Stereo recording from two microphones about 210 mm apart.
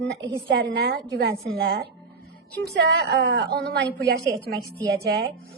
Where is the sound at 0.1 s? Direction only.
50° right (ahead or behind).